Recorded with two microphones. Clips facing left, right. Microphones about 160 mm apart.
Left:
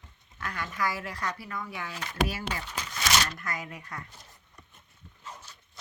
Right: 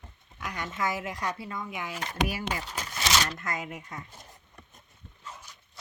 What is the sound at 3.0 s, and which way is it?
Speech, 20° right (ahead or behind).